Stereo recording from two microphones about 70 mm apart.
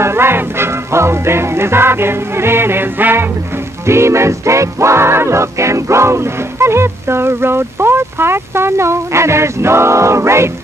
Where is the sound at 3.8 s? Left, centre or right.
Right.